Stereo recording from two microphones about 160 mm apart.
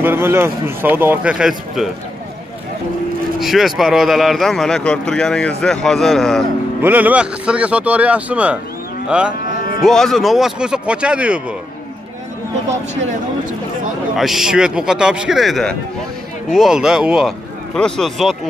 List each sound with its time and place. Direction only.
0.0 s speech: 15° right (ahead or behind)
3.3 s a man's voice: centre (ahead or behind)
6.8 s a man's voice: 10° right (ahead or behind)
12.6 s speech: 50° right (ahead or behind)
14.1 s a man's voice: centre (ahead or behind)